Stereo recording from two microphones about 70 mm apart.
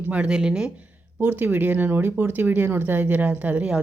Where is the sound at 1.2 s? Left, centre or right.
Right.